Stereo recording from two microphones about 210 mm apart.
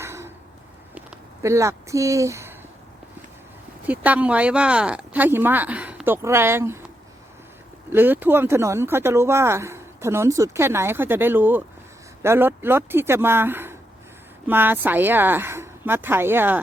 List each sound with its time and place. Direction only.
0.0 s a sound: 10° right (ahead or behind)
3.8 s speech: 5° right (ahead or behind)
7.9 s speech: 10° right (ahead or behind)